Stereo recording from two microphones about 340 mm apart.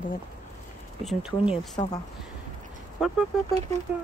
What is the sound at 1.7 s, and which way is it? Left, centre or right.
Speech, centre.